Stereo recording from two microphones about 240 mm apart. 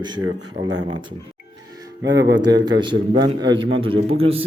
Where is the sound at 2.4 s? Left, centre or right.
Centre.